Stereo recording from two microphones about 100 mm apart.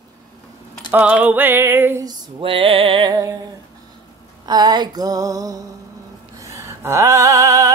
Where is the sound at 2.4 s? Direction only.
65° right (ahead or behind).